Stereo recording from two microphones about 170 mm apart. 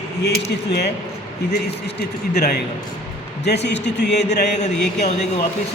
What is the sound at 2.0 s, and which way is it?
Speech, 70° left (ahead or behind).